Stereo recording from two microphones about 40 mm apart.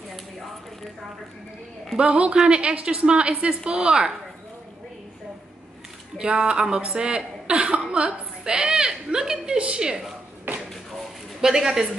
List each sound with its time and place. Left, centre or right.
2.0 s a woman's voice: right
6.1 s a woman's voice: right
11.4 s a woman's voice: centre